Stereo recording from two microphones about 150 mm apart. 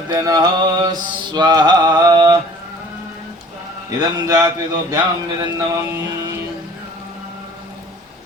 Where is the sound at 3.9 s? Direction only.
25° right (ahead or behind).